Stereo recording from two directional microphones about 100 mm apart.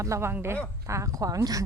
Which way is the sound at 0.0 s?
30° right (ahead or behind).